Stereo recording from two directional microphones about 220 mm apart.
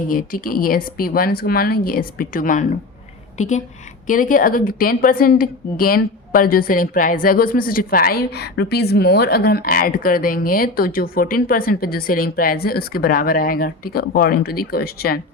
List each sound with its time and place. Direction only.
0.4 s a woman's voice: 40° left (ahead or behind)